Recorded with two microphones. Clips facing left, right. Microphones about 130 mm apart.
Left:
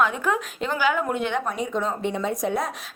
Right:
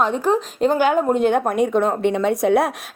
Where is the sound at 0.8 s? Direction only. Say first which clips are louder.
Right 4 dB; 45° right (ahead or behind).